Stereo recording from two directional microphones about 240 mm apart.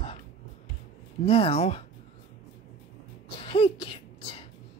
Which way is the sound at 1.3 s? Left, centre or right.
Left.